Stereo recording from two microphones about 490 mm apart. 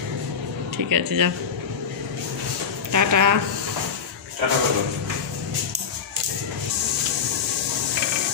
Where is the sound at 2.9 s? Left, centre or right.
Right.